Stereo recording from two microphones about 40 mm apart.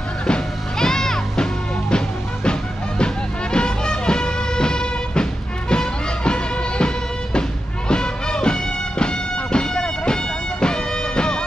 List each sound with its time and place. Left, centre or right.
0.3 s music: centre
3.5 s music: left
7.9 s music: left